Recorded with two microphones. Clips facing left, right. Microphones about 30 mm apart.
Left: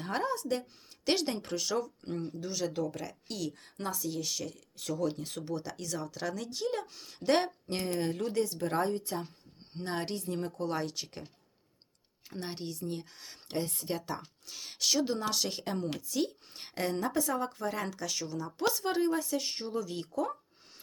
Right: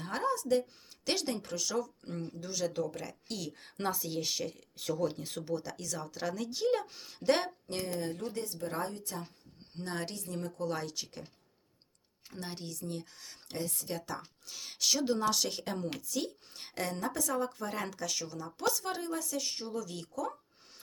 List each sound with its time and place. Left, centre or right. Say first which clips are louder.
0.0 s a sound: even; centre
1.0 s speech: left 3 dB; centre
3.6 s speech: right 1 dB; right; by 7.2 s centre
7.3 s speech: left 1 dB; centre
7.7 s speech: left 3 dB; left
9.7 s speech: left 3 dB; left
10.7 s speech: left 2 dB; centre
12.5 s speech: left 3 dB; left
13.6 s speech: left 3 dB; left
13.8 s speech: left 3 dB; centre
14.4 s speech: even; centre; by 17.3 s left
17.3 s speech: left 1 dB; centre
18.6 s speech: left 4 dB; centre